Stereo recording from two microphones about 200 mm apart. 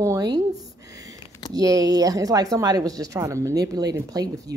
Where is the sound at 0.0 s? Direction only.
15° right (ahead or behind).